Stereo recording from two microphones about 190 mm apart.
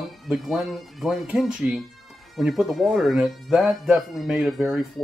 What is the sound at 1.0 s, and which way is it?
Speech, 5° right (ahead or behind).